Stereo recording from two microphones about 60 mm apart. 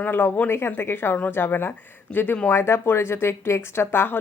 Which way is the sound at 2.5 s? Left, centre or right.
Left.